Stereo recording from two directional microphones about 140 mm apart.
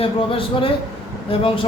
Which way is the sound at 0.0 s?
40° left (ahead or behind).